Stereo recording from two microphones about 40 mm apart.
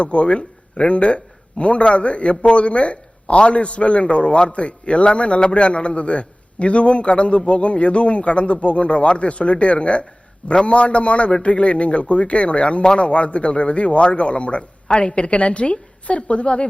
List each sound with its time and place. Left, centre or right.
0.0 s a man's voice: left